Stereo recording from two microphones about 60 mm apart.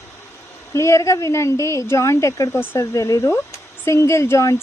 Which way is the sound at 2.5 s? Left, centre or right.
Left.